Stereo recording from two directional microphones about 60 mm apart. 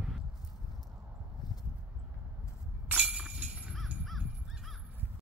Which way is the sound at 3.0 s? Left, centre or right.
Right.